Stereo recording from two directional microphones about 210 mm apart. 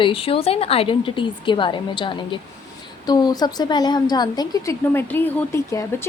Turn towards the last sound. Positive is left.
turn(degrees=15)  # may be behind; listen again after turning